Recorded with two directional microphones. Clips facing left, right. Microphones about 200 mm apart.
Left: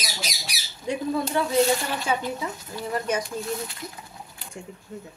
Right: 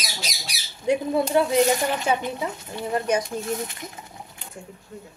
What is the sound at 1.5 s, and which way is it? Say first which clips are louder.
Speech: right 2 dB; 15° right (ahead or behind).